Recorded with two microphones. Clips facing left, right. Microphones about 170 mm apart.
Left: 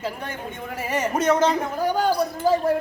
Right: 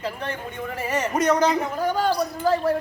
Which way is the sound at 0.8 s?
5° left (ahead or behind).